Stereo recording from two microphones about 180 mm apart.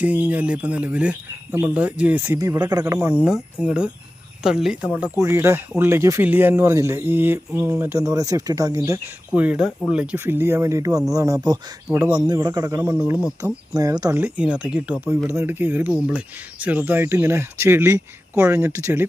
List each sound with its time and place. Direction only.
0.0 s speech: 10° right (ahead or behind)
11.9 s speech: 10° right (ahead or behind)
12.2 s speech: 20° right (ahead or behind)
12.8 s speech: 5° right (ahead or behind)
13.4 s speech: 20° right (ahead or behind)
14.2 s speech: 5° right (ahead or behind)